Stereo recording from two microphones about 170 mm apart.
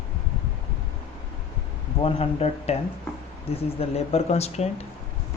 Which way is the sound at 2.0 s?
35° left (ahead or behind).